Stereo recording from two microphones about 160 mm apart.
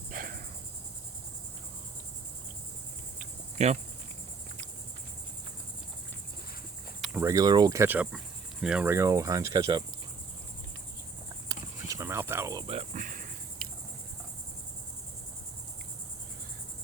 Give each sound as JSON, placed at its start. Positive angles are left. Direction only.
{"t": 0.1, "sound": "cricket", "side_deg": -60}
{"t": 3.2, "sound": "cricket", "side_deg": -45}
{"t": 7.2, "sound": "cricket", "side_deg": -20}
{"t": 11.4, "sound": "cricket", "side_deg": -20}
{"t": 12.6, "sound": "cricket", "side_deg": -40}